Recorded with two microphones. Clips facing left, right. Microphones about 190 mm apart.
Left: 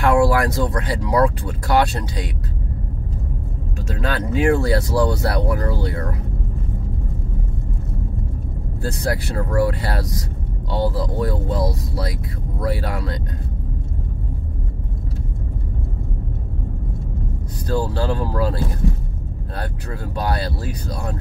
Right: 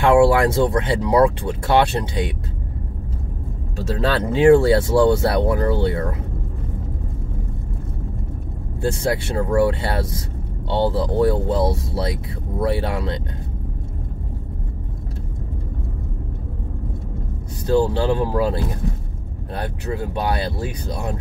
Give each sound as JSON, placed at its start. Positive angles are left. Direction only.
{"t": 0.0, "sound": "speech", "side_deg": -25}
{"t": 3.7, "sound": "speech", "side_deg": -30}
{"t": 8.8, "sound": "speech", "side_deg": -25}
{"t": 17.6, "sound": "speech", "side_deg": -25}